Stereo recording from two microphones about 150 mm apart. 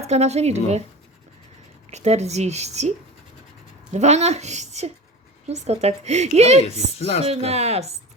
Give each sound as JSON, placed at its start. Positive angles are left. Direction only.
{"t": 0.0, "sound": "a woman's voice", "side_deg": -45}
{"t": 1.9, "sound": "a woman's voice", "side_deg": -50}
{"t": 3.9, "sound": "a woman's voice", "side_deg": -50}
{"t": 7.0, "sound": "speech", "side_deg": 45}
{"t": 7.3, "sound": "a woman's voice", "side_deg": -45}